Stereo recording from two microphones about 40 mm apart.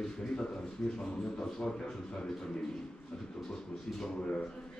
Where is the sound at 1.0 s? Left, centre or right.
Centre.